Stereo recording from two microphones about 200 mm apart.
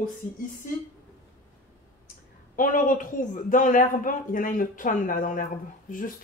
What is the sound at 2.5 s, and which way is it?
A man's voice, 40° left (ahead or behind).